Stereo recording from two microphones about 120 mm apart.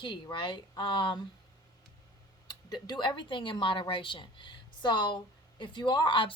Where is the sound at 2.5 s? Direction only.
40° left (ahead or behind).